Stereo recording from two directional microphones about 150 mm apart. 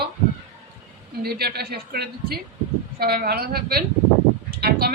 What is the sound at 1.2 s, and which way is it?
Speech, 90° right.